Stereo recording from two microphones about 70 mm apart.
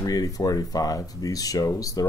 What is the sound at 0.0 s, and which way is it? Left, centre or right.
Speech, left.